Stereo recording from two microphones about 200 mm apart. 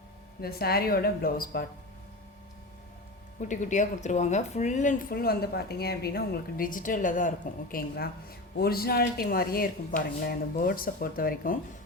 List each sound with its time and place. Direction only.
0.4 s speech: 50° left (ahead or behind)
3.5 s speech: 40° left (ahead or behind)